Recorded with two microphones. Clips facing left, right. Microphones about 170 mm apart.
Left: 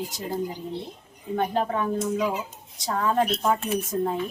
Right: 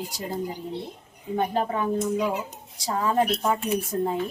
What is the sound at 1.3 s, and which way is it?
A woman's voice, 5° right (ahead or behind).